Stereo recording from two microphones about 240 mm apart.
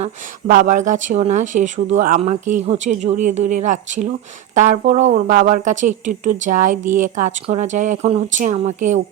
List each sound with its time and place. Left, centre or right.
0.0 s speech: right